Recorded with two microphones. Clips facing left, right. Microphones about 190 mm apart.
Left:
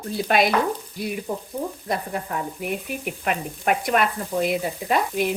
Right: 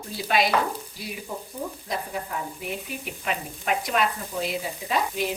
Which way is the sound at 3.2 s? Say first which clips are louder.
Left 5 dB; 55° left (ahead or behind).